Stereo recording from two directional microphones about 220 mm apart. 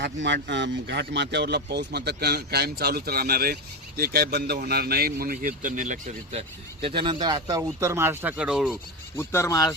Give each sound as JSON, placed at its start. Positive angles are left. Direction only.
{"t": 0.0, "sound": "speech", "side_deg": -50}
{"t": 6.8, "sound": "speech", "side_deg": -20}
{"t": 9.1, "sound": "speech", "side_deg": 10}